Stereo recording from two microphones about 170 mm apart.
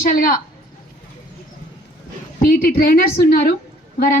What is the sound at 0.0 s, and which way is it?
Speech, 55° left (ahead or behind).